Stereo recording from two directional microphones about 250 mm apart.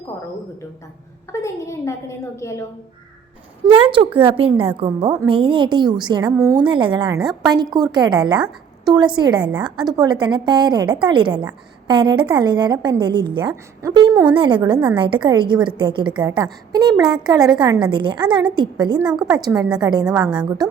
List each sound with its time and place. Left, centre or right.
1.3 s a woman's voice: centre
3.7 s a woman's voice: right
20.1 s a woman's voice: centre